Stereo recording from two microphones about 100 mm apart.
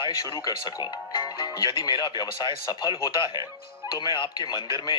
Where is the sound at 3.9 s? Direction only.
50° left (ahead or behind).